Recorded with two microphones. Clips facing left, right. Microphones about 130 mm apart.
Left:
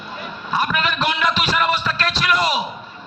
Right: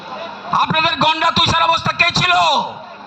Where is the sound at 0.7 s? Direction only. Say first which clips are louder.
Right 5 dB; 75° right (ahead or behind).